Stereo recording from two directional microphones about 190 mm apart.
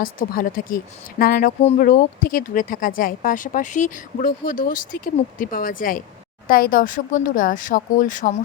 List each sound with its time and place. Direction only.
0.0 s speech: 45° left (ahead or behind)